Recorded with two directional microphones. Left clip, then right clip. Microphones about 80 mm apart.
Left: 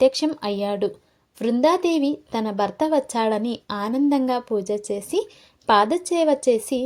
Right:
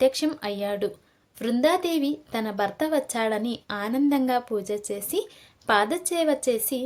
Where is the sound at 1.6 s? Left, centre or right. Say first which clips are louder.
Left 3 dB; left.